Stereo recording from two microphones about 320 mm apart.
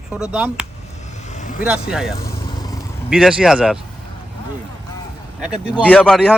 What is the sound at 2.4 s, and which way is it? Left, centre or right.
Vehicle, centre.